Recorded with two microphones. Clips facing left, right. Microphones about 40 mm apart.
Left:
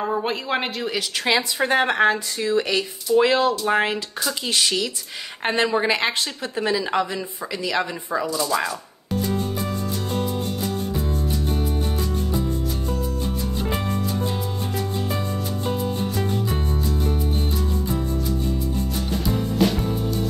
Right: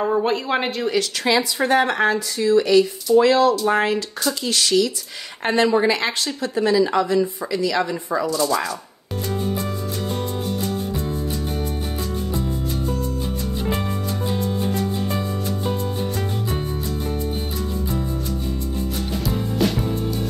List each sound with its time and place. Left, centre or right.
0.2 s speech: centre
1.2 s speech: left
9.2 s music: centre
19.2 s music: centre